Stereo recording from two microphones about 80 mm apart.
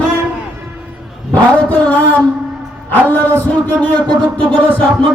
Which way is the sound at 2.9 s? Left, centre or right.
Left.